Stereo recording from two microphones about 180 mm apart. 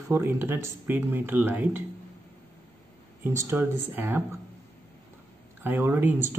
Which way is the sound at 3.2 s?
15° right (ahead or behind).